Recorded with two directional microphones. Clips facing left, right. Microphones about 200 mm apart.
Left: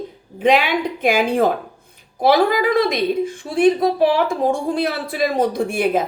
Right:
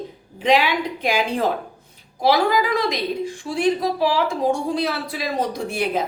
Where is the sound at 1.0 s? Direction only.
50° left (ahead or behind).